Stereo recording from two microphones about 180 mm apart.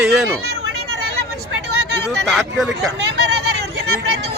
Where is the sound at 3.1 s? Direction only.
65° right (ahead or behind).